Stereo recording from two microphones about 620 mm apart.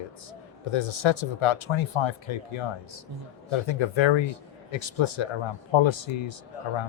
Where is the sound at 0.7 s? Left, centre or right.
Left.